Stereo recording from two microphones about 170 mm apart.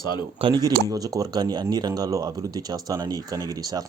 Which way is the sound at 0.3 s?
30° right (ahead or behind).